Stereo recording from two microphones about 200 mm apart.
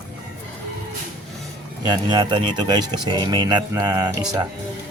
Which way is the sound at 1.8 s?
20° right (ahead or behind).